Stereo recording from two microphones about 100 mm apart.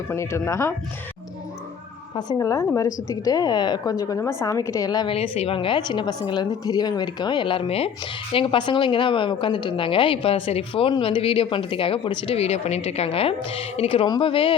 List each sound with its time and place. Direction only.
0.1 s speech: 25° left (ahead or behind)
2.4 s a woman's voice: 35° left (ahead or behind)
5.0 s a woman's voice: 70° left (ahead or behind)